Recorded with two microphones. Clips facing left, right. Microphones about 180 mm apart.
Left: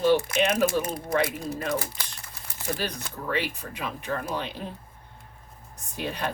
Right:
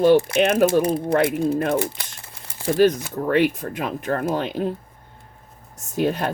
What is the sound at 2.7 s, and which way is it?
Speech, 45° right (ahead or behind).